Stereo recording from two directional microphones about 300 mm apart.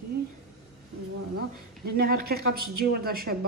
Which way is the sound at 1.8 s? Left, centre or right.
Right.